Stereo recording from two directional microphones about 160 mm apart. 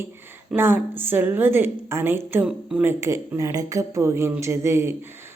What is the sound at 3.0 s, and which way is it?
A woman's voice, 20° right (ahead or behind).